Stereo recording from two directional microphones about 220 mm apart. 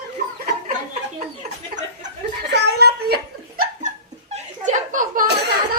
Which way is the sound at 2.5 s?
45° right (ahead or behind).